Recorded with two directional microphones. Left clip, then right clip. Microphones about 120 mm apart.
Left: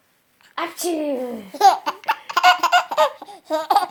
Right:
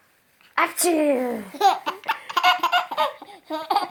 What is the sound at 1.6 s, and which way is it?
Laughter, 25° left (ahead or behind).